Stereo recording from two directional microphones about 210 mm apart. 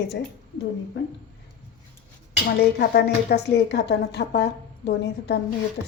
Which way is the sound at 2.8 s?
50° left (ahead or behind).